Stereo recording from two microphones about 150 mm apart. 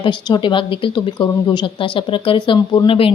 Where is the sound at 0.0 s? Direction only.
30° left (ahead or behind).